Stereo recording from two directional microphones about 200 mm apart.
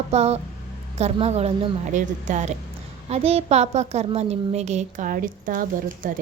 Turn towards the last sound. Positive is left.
turn(degrees=-40)  # may be behind; listen again after turning